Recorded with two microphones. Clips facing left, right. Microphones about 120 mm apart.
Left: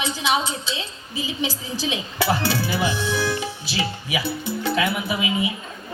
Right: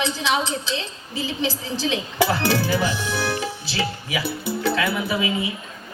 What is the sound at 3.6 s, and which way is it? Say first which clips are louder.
Music: even; 15° left (ahead or behind).